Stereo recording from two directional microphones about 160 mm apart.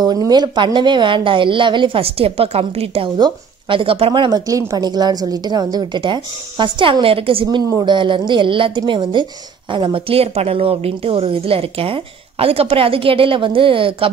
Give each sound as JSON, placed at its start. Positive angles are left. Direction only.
{"t": 0.0, "sound": "a woman's voice", "side_deg": -25}